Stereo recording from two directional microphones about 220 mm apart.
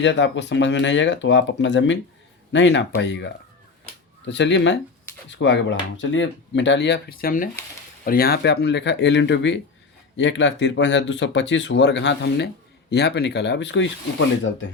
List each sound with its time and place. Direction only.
0.0 s speech: 55° left (ahead or behind)